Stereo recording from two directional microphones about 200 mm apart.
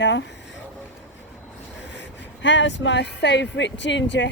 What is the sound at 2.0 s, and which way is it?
Speech, 65° left (ahead or behind).